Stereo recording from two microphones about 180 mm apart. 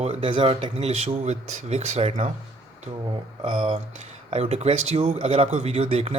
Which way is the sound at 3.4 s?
30° right (ahead or behind).